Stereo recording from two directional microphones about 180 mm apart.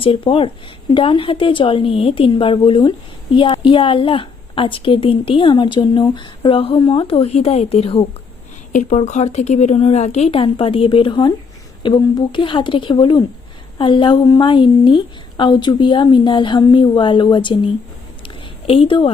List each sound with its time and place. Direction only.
0.0 s a woman's voice: 30° left (ahead or behind)
8.7 s a woman's voice: 45° left (ahead or behind); by 17.7 s 30° left (ahead or behind)
18.7 s speech: 30° left (ahead or behind)